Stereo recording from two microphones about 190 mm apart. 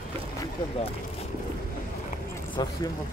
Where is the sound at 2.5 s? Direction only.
25° left (ahead or behind).